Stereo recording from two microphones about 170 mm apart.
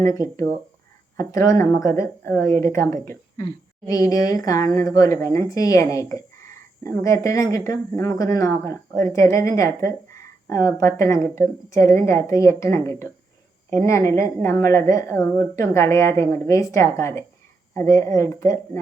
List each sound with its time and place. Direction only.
0.0 s a woman's voice: 20° left (ahead or behind)